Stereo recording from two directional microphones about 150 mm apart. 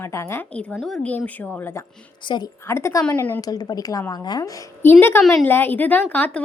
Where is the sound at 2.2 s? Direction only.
30° left (ahead or behind).